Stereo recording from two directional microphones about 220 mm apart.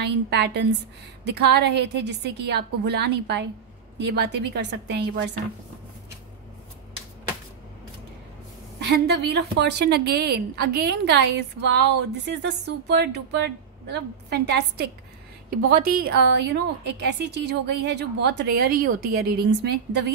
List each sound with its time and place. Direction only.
0.0 s a woman's voice: 50° right (ahead or behind)
8.8 s a woman's voice: 50° right (ahead or behind)
16.1 s a woman's voice: 50° right (ahead or behind)